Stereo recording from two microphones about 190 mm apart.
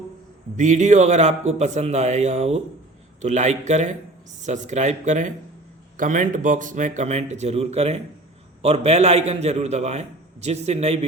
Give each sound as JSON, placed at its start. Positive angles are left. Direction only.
{"t": 0.5, "sound": "a man's voice", "side_deg": -40}